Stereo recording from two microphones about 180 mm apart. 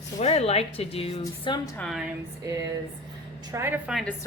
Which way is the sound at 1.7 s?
Centre (ahead or behind).